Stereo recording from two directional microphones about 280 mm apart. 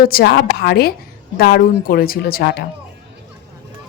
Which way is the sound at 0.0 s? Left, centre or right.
Left.